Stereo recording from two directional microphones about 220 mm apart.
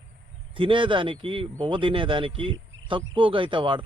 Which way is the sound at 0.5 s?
25° right (ahead or behind).